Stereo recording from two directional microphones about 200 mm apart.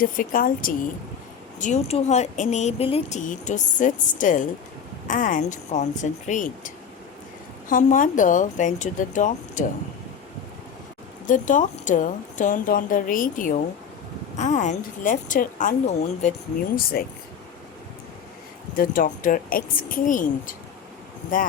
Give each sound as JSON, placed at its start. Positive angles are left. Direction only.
{"t": 0.0, "sound": "speech", "side_deg": 45}
{"t": 7.7, "sound": "speech", "side_deg": 40}
{"t": 11.3, "sound": "speech", "side_deg": 40}
{"t": 17.0, "sound": "speech", "side_deg": 50}
{"t": 18.8, "sound": "speech", "side_deg": 45}